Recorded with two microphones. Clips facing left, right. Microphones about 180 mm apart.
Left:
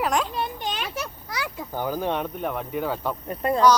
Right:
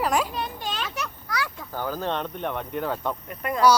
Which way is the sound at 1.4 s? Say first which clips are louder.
Left 3 dB; 15° left (ahead or behind).